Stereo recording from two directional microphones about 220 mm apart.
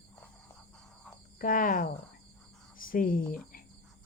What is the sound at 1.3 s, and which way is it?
Speech, 40° left (ahead or behind).